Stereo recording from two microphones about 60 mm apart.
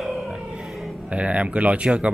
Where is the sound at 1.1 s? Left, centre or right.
Right.